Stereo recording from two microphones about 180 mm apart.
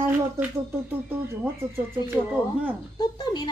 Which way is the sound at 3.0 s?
25° left (ahead or behind).